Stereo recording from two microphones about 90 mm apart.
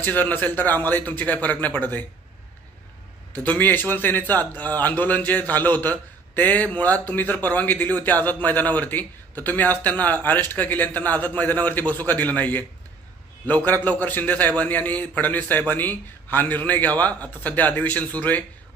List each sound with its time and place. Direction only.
0.0 s a man's voice: 20° left (ahead or behind)
3.3 s a man's voice: 15° left (ahead or behind)
13.7 s a man's voice: 20° left (ahead or behind)